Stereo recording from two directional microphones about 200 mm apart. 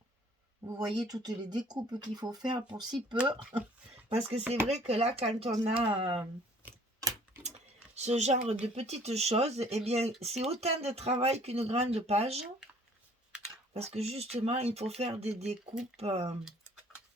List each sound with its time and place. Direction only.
0.6 s speech: 15° right (ahead or behind)
6.6 s a sound: 10° right (ahead or behind)
7.9 s speech: 35° right (ahead or behind)
13.7 s speech: 30° right (ahead or behind)